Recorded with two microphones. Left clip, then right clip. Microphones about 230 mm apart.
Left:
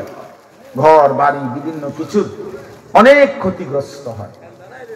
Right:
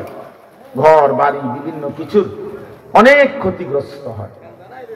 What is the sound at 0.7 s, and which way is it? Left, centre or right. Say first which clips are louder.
Speech: even; right.